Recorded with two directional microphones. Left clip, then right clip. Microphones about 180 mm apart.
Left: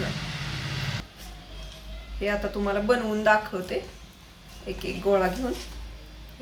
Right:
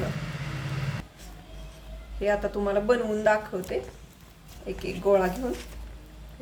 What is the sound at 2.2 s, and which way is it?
Speech, 15° right (ahead or behind).